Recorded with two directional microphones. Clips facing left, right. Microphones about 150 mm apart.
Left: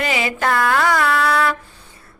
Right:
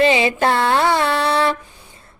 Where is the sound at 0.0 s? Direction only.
25° right (ahead or behind).